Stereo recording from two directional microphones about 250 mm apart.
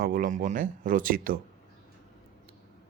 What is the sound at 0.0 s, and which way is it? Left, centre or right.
Speech, right.